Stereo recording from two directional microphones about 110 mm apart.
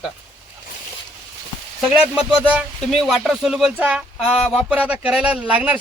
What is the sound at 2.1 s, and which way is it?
Speech, 10° right (ahead or behind).